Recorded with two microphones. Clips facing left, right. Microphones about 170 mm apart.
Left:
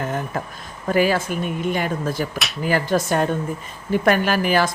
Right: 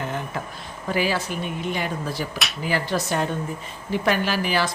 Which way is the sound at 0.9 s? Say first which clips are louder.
Left 5 dB; 50° left (ahead or behind).